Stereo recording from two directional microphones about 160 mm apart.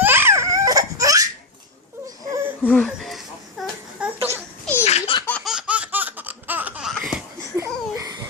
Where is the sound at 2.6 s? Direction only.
5° left (ahead or behind).